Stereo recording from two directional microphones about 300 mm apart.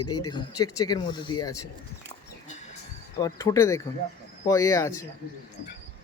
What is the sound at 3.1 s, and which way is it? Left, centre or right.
Speech, centre.